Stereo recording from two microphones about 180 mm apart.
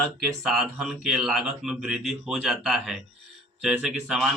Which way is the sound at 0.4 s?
Centre (ahead or behind).